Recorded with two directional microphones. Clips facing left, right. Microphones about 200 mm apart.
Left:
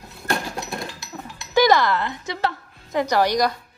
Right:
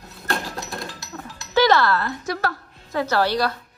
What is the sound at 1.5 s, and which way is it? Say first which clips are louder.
A woman's voice: left 1 dB; 15° left (ahead or behind).